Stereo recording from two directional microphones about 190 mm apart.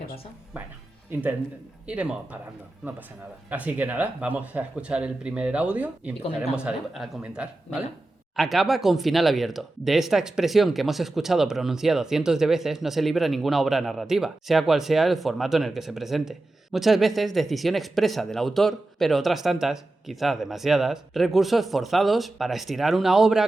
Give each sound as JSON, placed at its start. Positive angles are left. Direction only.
{"t": 1.1, "sound": "speech", "side_deg": -10}
{"t": 3.5, "sound": "speech", "side_deg": -10}